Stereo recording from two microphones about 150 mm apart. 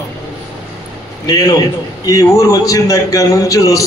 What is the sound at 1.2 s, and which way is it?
A man's voice, 25° left (ahead or behind).